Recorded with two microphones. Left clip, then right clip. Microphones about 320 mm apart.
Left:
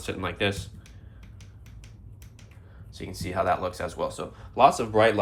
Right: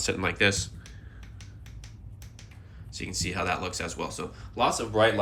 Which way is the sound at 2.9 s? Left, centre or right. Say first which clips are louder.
Left 2 dB; centre.